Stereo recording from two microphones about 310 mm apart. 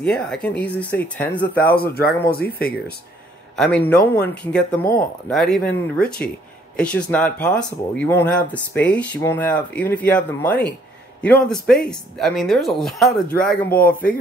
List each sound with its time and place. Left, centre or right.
0.0 s speech: centre
1.8 s speech: left
3.5 s speech: centre